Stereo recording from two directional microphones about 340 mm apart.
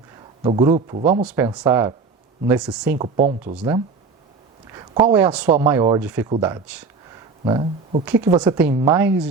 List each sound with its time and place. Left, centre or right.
0.4 s speech: centre
1.2 s speech: centre
3.0 s speech: centre
4.7 s speech: centre